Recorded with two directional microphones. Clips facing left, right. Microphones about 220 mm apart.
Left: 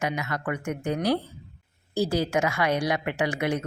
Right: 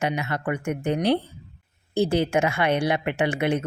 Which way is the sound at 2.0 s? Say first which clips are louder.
Right 3 dB; 25° right (ahead or behind).